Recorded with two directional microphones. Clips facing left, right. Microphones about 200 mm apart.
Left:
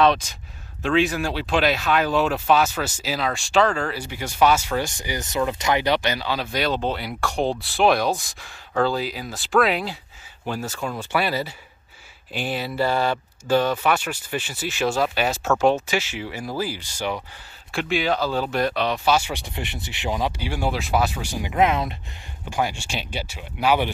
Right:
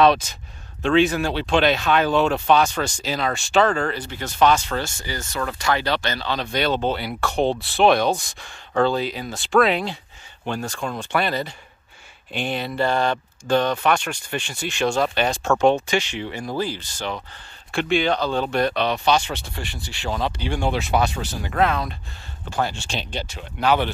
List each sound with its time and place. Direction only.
0.8 s speech: centre (ahead or behind)